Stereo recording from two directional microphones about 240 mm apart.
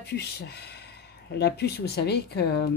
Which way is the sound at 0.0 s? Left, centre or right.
Left.